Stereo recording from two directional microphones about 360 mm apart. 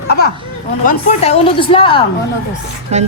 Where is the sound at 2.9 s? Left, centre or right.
Centre.